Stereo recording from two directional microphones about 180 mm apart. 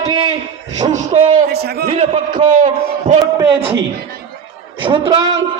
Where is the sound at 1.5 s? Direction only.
65° right (ahead or behind).